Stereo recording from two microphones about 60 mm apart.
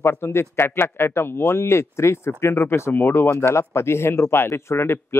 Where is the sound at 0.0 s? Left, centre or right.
Left.